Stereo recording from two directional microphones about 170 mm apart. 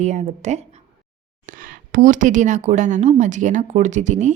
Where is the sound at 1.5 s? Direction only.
55° right (ahead or behind).